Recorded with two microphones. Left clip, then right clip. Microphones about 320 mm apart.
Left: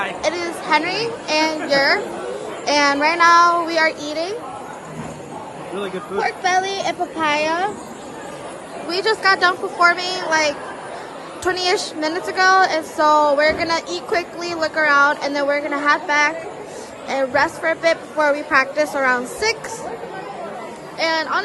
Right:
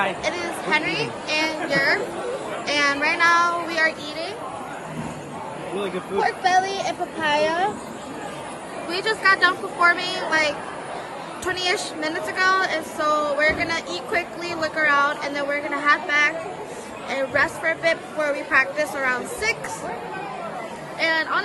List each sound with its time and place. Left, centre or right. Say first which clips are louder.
0.2 s a child's voice: left 4 dB; centre
5.8 s speech: left 1 dB; left
8.9 s speech: left 3 dB; centre
21.0 s speech: left 2 dB; centre